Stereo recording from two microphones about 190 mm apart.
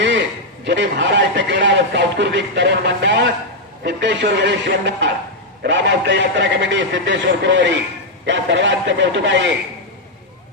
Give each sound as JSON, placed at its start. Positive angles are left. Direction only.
{"t": 0.6, "sound": "a man's voice", "side_deg": -70}